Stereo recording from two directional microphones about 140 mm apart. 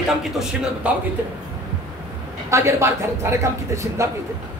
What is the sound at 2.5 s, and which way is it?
A man's voice, 20° right (ahead or behind).